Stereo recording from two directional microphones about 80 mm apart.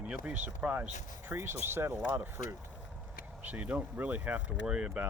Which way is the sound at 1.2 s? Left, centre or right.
Right.